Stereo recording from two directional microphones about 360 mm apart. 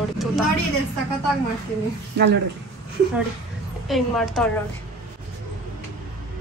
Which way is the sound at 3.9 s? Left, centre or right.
Centre.